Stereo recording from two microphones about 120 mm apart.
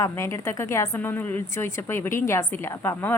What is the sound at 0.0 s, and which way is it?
A woman's voice, 25° left (ahead or behind).